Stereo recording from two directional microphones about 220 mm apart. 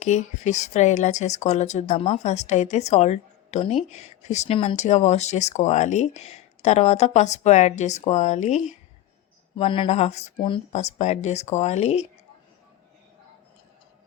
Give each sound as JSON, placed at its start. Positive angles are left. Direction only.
{"t": 0.0, "sound": "speech", "side_deg": 30}